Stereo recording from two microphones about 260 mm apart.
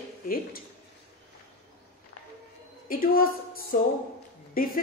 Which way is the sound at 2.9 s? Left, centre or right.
Left.